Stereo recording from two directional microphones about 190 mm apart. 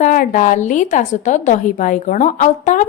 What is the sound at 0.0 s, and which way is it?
A woman's voice, 45° left (ahead or behind).